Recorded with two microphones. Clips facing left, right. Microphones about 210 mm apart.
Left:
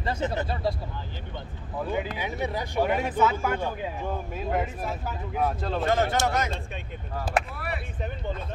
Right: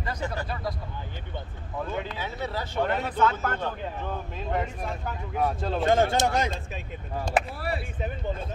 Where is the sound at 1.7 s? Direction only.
10° left (ahead or behind).